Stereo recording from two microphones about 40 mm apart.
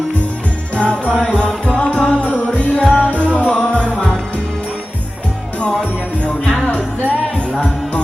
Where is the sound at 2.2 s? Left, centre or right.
Left.